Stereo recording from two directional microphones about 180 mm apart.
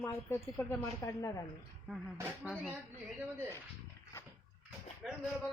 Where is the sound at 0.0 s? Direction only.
15° left (ahead or behind).